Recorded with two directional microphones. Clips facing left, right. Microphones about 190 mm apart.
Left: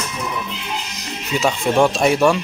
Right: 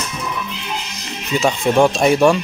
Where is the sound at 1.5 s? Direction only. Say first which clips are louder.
Right 2 dB; 10° right (ahead or behind).